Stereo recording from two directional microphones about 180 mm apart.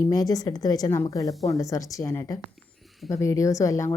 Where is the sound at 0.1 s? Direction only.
20° left (ahead or behind).